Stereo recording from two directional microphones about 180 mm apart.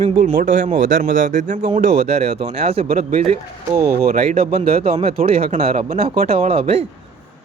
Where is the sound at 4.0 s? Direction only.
60° right (ahead or behind).